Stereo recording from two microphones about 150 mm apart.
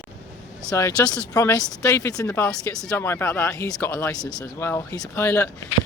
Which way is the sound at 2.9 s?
15° left (ahead or behind).